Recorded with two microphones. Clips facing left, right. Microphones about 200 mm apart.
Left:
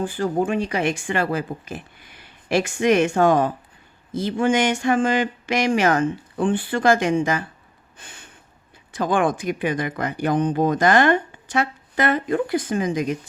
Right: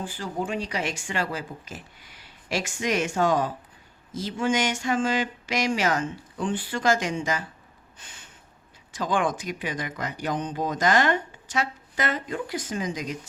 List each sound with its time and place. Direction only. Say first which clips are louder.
0.0 s speech: left 9 dB; 55° left (ahead or behind)
7.9 s a sound: left 6 dB; 55° left (ahead or behind)
8.9 s speech: left 5 dB; 55° left (ahead or behind)